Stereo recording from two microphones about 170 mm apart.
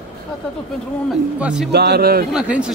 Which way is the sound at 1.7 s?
75° right (ahead or behind).